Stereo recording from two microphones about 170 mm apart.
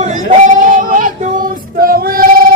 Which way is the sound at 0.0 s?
50° right (ahead or behind).